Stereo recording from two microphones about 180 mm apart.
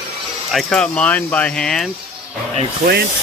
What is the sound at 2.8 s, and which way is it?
Speech, 60° right (ahead or behind).